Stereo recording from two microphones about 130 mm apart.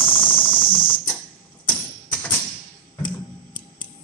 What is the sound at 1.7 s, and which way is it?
Music, 10° left (ahead or behind).